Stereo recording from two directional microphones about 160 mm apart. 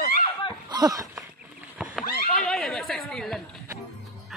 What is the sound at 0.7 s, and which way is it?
Speech, 25° right (ahead or behind).